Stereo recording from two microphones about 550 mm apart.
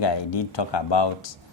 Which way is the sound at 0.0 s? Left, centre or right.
Left.